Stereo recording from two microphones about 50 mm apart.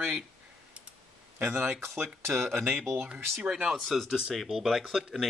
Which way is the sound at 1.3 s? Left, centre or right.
Right.